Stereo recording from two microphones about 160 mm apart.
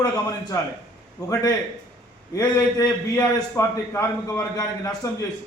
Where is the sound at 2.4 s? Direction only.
25° left (ahead or behind).